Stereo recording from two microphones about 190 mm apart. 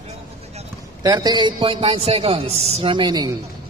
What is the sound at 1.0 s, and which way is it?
A man's voice, 20° right (ahead or behind).